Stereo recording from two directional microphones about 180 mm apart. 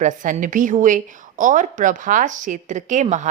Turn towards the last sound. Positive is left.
turn(degrees=-45)  # may be behind; listen again after turning